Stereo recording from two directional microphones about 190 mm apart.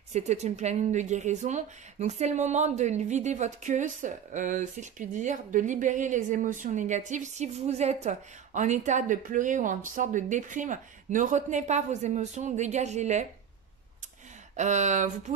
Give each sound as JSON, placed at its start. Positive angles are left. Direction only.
{"t": 0.1, "sound": "speech", "side_deg": -35}
{"t": 14.6, "sound": "speech", "side_deg": -40}